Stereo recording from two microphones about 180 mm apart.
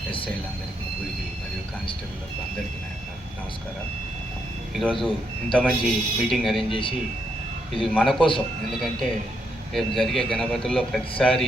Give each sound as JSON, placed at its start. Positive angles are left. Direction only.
{"t": 4.7, "sound": "speech", "side_deg": 0}
{"t": 6.7, "sound": "speech", "side_deg": 30}
{"t": 7.7, "sound": "a man's voice", "side_deg": 0}